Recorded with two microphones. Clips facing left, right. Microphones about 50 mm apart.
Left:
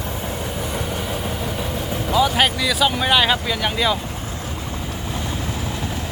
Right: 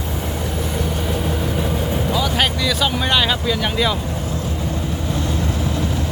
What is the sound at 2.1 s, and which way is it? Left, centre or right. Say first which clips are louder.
Speech: left 5 dB; centre.